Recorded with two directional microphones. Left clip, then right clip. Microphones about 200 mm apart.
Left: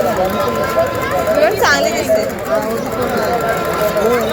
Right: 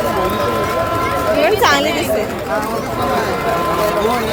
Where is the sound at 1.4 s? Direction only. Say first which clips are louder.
Right 1 dB; 25° right (ahead or behind).